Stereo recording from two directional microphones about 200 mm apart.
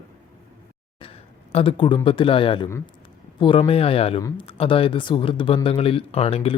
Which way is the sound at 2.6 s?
15° left (ahead or behind).